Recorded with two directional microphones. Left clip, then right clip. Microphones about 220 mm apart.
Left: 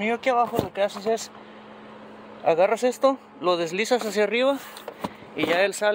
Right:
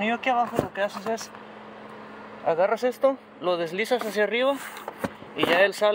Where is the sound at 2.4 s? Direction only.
30° left (ahead or behind).